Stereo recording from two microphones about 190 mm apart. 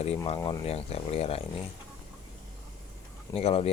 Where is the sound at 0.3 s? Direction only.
20° left (ahead or behind).